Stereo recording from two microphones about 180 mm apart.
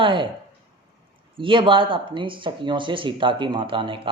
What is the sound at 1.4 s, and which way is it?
Speech, 30° right (ahead or behind).